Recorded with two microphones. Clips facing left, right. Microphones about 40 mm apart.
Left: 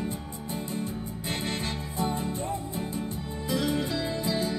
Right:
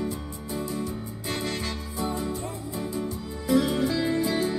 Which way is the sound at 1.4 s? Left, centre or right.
Left.